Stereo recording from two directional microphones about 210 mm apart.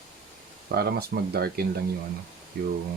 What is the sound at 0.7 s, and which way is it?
Speech, 50° right (ahead or behind).